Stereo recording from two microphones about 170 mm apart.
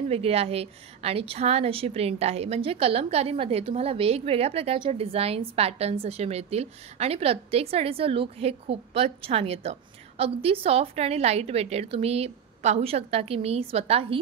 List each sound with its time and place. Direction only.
0.1 s a woman's voice: 35° right (ahead or behind)